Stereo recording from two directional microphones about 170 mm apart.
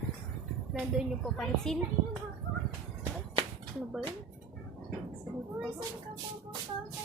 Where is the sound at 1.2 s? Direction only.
5° left (ahead or behind).